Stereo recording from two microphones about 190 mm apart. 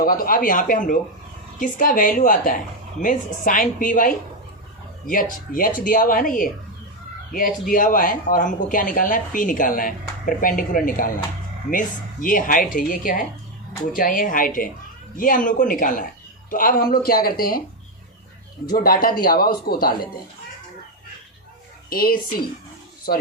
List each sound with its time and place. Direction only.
0.0 s speech: 50° left (ahead or behind)
7.7 s speech: 45° left (ahead or behind)
18.6 s speech: 50° left (ahead or behind)
21.8 s speech: 50° left (ahead or behind)